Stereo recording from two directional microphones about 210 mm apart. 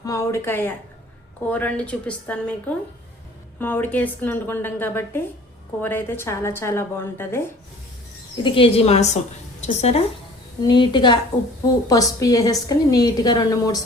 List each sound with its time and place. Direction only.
0.0 s a woman's voice: 15° left (ahead or behind)
8.4 s a woman's voice: 25° left (ahead or behind)
10.6 s a woman's voice: 20° left (ahead or behind)